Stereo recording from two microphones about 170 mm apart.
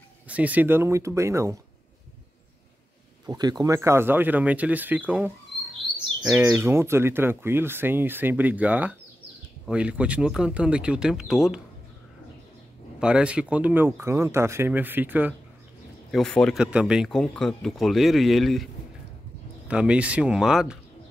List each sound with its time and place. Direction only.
0.3 s speech: 10° right (ahead or behind)
3.3 s speech: 25° right (ahead or behind); by 11.6 s centre (ahead or behind)
13.0 s speech: 5° right (ahead or behind)
16.1 s speech: 5° left (ahead or behind)
19.7 s speech: 5° right (ahead or behind)